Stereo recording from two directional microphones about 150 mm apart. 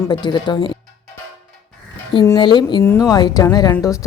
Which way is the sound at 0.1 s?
30° left (ahead or behind).